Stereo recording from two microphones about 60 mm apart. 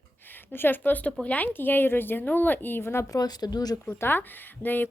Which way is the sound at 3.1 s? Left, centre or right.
Left.